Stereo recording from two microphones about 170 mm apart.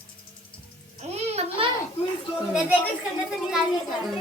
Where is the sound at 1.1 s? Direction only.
35° right (ahead or behind).